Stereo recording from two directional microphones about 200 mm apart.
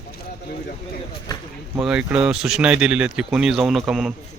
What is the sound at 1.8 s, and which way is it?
A man's voice, 5° right (ahead or behind).